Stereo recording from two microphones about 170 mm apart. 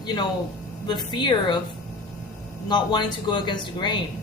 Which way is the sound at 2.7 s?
25° left (ahead or behind).